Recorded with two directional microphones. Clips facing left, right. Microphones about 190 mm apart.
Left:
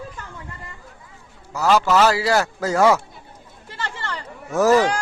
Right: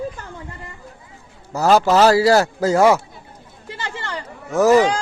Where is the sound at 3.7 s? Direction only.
15° right (ahead or behind).